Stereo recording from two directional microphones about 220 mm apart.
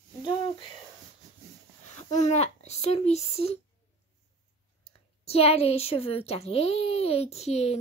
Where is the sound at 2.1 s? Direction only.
30° left (ahead or behind).